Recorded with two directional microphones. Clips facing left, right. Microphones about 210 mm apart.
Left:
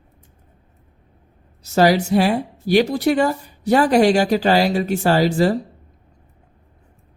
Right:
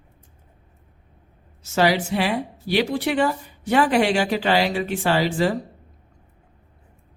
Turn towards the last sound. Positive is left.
turn(degrees=40)  # may be behind; listen again after turning